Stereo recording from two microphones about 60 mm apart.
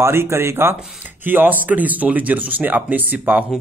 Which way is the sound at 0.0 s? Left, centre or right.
Right.